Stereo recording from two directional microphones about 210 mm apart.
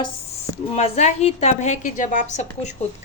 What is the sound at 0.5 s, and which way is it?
A woman's voice, 30° left (ahead or behind).